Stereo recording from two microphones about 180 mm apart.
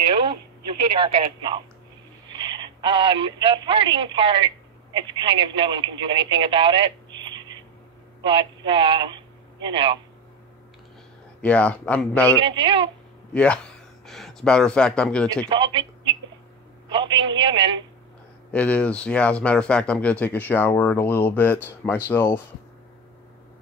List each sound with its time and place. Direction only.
1.0 s a man's voice: 30° right (ahead or behind)
11.4 s speech: 5° left (ahead or behind)
12.4 s a man's voice: 30° right (ahead or behind)
13.3 s speech: 5° left (ahead or behind)
15.4 s a man's voice: 25° right (ahead or behind)
18.5 s speech: 10° left (ahead or behind)